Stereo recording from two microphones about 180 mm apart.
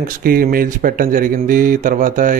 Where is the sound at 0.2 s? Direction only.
55° right (ahead or behind).